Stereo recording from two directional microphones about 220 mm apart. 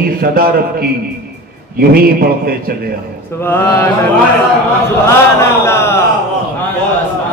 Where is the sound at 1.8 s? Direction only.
45° right (ahead or behind).